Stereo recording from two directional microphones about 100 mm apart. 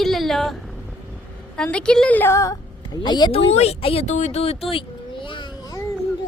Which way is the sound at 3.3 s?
90° left.